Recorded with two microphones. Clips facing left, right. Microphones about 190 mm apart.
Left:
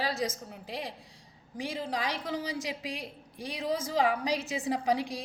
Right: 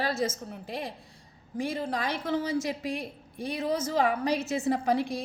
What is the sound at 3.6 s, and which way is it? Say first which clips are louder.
Speech: right 2 dB; 15° left (ahead or behind).